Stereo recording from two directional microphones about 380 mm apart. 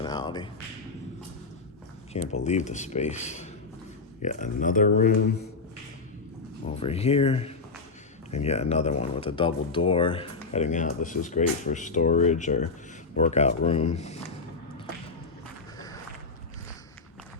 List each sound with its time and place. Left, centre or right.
0.0 s a sound: centre
2.1 s speech: centre
6.7 s speech: centre